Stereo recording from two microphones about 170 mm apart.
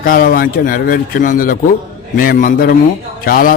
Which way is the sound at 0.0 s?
55° left (ahead or behind).